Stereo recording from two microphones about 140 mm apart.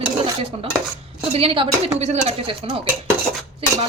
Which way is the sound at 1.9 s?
50° right (ahead or behind).